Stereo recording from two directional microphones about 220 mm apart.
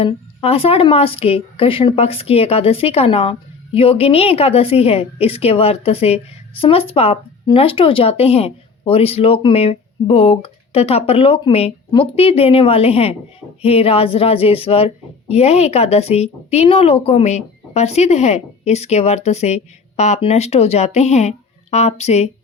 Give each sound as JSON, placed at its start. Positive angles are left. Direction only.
{"t": 0.0, "sound": "a woman's voice", "side_deg": 25}